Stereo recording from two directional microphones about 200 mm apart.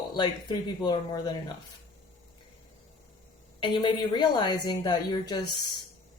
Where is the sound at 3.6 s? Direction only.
25° left (ahead or behind).